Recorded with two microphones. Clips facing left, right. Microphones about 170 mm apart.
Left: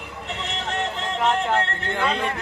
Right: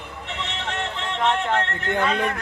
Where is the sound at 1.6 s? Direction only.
35° left (ahead or behind).